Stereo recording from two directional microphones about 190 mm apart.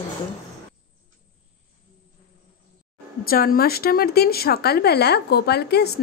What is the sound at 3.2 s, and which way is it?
A woman's voice, 50° left (ahead or behind).